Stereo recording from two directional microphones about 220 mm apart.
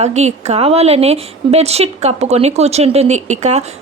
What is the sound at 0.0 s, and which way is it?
Speech, 30° right (ahead or behind).